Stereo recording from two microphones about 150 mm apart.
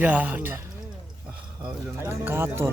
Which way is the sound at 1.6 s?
15° right (ahead or behind).